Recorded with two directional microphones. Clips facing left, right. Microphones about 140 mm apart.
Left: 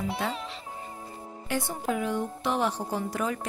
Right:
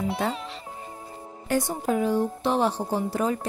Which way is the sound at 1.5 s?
40° right (ahead or behind).